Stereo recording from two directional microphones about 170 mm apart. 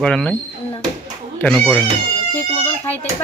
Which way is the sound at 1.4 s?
5° left (ahead or behind).